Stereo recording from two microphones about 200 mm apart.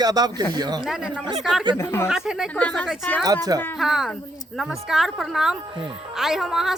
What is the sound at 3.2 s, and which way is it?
Speech, 20° right (ahead or behind).